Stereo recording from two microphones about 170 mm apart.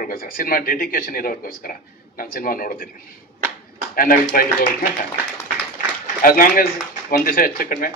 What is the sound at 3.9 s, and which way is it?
Speech, 60° left (ahead or behind).